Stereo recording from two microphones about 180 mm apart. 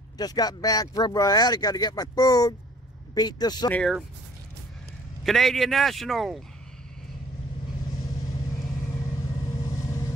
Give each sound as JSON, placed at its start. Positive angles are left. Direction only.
{"t": 0.2, "sound": "speech", "side_deg": 20}
{"t": 3.7, "sound": "speech", "side_deg": 0}
{"t": 5.2, "sound": "speech", "side_deg": 0}
{"t": 9.6, "sound": "vehicle", "side_deg": 20}